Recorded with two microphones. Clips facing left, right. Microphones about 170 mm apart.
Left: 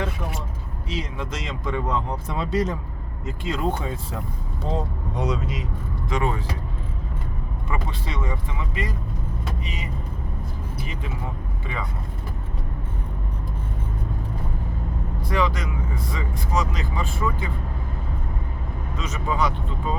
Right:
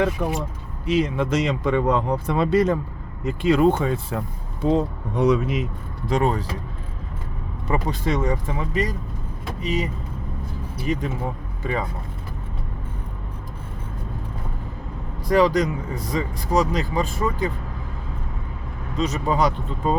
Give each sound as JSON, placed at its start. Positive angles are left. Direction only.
{"t": 0.2, "sound": "vehicle", "side_deg": -70}
{"t": 0.9, "sound": "speech", "side_deg": -60}
{"t": 6.1, "sound": "speech", "side_deg": -35}
{"t": 7.7, "sound": "speech", "side_deg": -45}
{"t": 11.6, "sound": "speech", "side_deg": -40}
{"t": 15.3, "sound": "speech", "side_deg": -40}
{"t": 18.9, "sound": "speech", "side_deg": -35}